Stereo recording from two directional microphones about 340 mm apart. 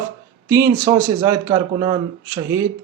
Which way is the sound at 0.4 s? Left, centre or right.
Centre.